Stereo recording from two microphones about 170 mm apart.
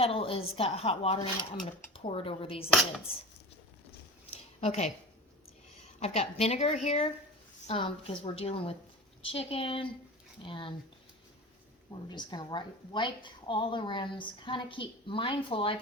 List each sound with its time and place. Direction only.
0.0 s speech: 35° left (ahead or behind)
4.3 s a sound: 35° left (ahead or behind)
6.0 s speech: 35° left (ahead or behind)
11.9 s a woman's voice: 25° left (ahead or behind)